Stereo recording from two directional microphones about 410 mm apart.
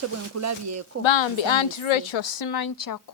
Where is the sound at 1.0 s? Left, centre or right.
Left.